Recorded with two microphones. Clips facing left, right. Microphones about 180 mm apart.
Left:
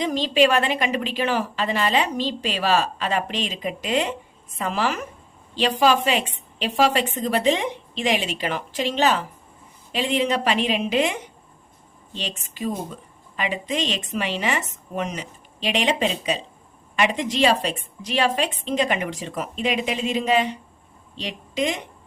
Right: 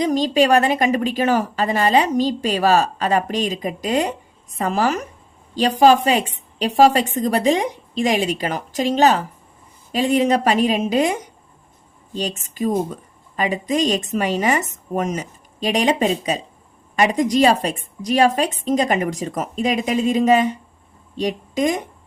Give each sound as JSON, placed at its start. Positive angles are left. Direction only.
{"t": 0.0, "sound": "a woman's voice", "side_deg": -40}